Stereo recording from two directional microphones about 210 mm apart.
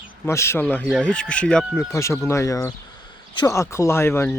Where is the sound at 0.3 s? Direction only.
10° left (ahead or behind).